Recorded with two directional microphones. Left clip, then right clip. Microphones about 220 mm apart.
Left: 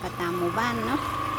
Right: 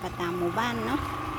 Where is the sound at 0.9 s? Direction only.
20° left (ahead or behind).